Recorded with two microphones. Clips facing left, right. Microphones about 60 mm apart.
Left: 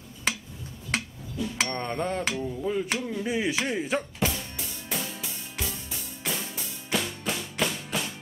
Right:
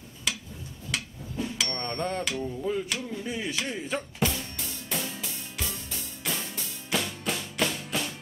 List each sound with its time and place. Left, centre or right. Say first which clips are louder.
1.7 s speech: left 2 dB; centre
2.9 s speech: left 4 dB; left
3.8 s music: left 2 dB; centre